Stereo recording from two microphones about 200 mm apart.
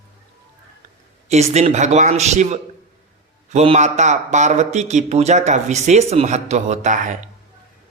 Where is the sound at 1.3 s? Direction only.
35° right (ahead or behind).